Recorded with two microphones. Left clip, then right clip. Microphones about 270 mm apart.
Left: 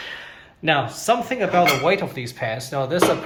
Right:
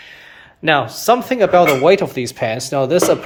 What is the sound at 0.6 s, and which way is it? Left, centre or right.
Speech, centre.